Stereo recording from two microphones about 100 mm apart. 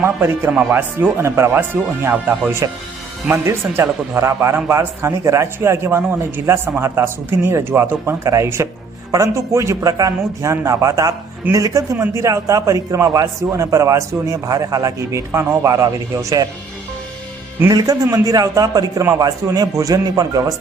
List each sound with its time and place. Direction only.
0.0 s speech: 20° right (ahead or behind)
2.6 s a man's voice: 35° right (ahead or behind)
3.2 s a man's voice: 25° right (ahead or behind)
17.7 s a man's voice: 40° right (ahead or behind)